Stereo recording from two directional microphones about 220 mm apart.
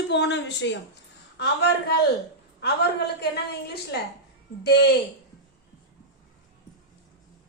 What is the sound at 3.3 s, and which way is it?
A woman's voice, 50° left (ahead or behind).